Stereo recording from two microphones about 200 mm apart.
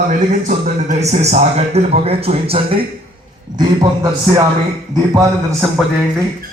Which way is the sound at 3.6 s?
20° right (ahead or behind).